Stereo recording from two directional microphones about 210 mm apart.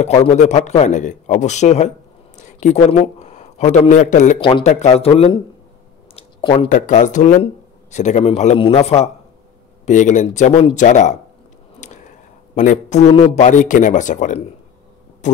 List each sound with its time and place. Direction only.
0.0 s a man's voice: 30° left (ahead or behind)
4.4 s speech: 25° left (ahead or behind)
6.1 s a sound: 25° left (ahead or behind)
6.7 s a man's voice: 35° left (ahead or behind)
11.8 s whispering: 35° left (ahead or behind)
12.5 s a man's voice: 35° left (ahead or behind)